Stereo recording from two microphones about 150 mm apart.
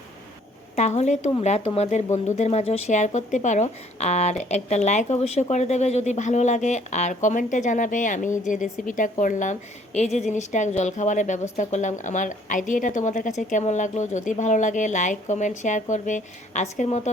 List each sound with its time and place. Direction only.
0.8 s a woman's voice: 50° left (ahead or behind)